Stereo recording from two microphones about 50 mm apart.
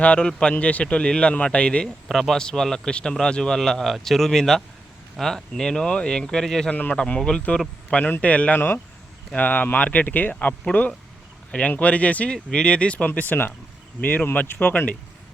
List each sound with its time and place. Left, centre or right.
0.0 s speech: left
2.0 s a man's voice: centre
6.7 s speech: left
6.9 s speech: centre
8.5 s speech: left
13.1 s speech: left
14.4 s speech: left